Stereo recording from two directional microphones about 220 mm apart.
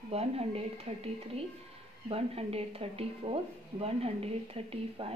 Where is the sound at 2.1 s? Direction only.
25° right (ahead or behind).